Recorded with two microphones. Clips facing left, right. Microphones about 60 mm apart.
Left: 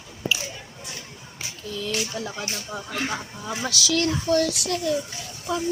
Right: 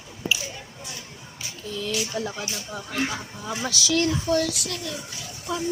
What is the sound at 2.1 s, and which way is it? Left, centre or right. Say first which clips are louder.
Speech: right 2 dB; centre.